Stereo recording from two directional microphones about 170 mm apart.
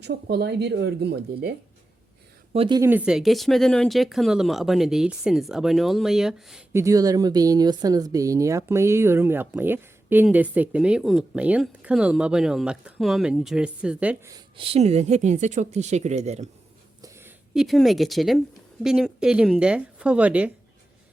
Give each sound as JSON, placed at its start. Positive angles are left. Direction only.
{"t": 0.0, "sound": "speech", "side_deg": -75}
{"t": 2.5, "sound": "speech", "side_deg": -30}
{"t": 2.8, "sound": "speech", "side_deg": -10}
{"t": 6.7, "sound": "speech", "side_deg": -20}
{"t": 14.3, "sound": "speech", "side_deg": -20}
{"t": 14.6, "sound": "speech", "side_deg": -35}
{"t": 17.0, "sound": "a sound", "side_deg": -15}
{"t": 17.5, "sound": "speech", "side_deg": 0}